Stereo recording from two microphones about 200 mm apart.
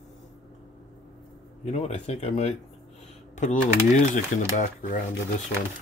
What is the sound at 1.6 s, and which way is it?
Speech, 35° left (ahead or behind).